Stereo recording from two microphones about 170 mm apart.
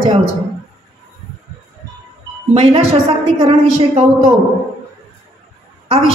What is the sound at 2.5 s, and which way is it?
A woman's voice, 35° right (ahead or behind).